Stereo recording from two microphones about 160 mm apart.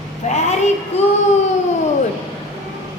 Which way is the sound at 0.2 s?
45° left (ahead or behind).